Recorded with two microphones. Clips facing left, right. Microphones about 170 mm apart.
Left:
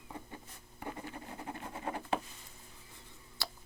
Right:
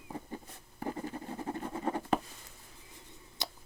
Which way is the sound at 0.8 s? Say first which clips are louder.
Right 6 dB; 35° right (ahead or behind).